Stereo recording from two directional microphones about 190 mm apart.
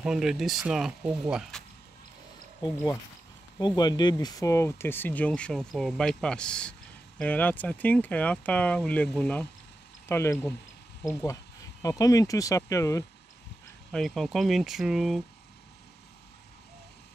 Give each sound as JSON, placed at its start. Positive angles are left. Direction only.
{"t": 0.0, "sound": "speech", "side_deg": -5}
{"t": 2.6, "sound": "speech", "side_deg": 20}
{"t": 13.9, "sound": "speech", "side_deg": 0}